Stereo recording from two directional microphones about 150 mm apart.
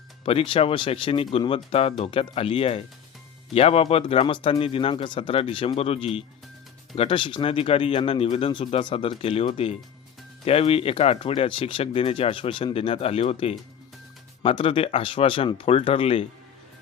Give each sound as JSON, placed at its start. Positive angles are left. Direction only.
{"t": 0.3, "sound": "speech", "side_deg": 35}